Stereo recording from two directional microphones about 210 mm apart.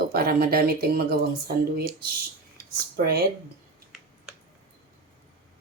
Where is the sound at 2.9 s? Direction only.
50° right (ahead or behind).